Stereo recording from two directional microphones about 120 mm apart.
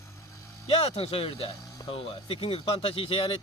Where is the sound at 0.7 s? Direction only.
55° left (ahead or behind).